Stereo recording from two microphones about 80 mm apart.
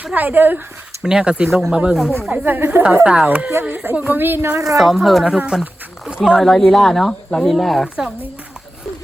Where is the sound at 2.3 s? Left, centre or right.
Right.